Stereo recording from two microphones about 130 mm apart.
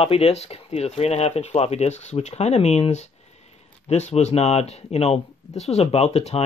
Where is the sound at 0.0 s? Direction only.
50° left (ahead or behind).